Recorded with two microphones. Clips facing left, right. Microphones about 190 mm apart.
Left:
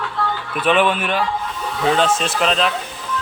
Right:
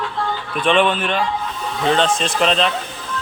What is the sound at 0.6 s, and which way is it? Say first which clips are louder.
A man's voice: even; 5° left (ahead or behind).